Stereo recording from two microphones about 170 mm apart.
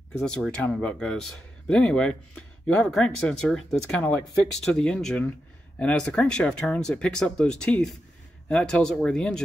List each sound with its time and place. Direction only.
0.2 s speech: 5° left (ahead or behind)